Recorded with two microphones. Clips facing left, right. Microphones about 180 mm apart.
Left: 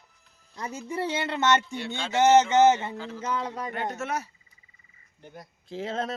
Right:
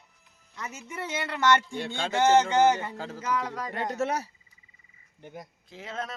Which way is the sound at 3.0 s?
45° right (ahead or behind).